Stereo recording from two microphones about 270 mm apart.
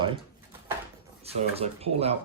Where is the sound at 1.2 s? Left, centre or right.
Right.